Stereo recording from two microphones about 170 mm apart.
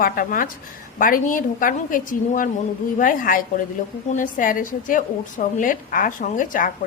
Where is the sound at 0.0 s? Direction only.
55° left (ahead or behind).